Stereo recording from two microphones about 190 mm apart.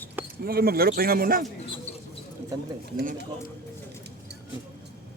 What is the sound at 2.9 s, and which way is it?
Speech, 60° right (ahead or behind).